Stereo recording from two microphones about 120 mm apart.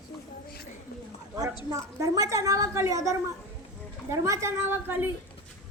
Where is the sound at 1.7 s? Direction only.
25° right (ahead or behind).